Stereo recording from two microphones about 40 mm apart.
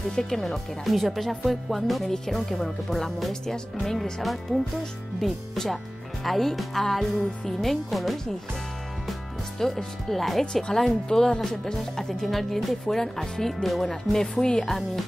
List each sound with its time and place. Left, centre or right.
0.1 s speech: centre
0.8 s speech: centre
9.6 s speech: centre
10.4 s speech: centre